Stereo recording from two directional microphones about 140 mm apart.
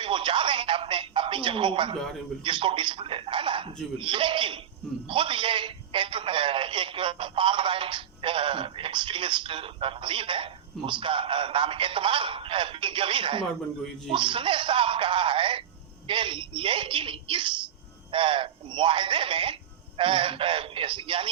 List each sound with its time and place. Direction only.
0.0 s music: 35° right (ahead or behind)
2.4 s a man's voice: 35° right (ahead or behind)